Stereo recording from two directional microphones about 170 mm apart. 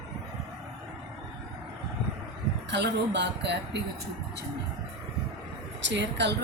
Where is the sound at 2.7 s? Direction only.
90° right.